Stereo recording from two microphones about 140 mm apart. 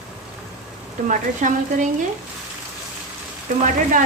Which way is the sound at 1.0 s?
65° right (ahead or behind).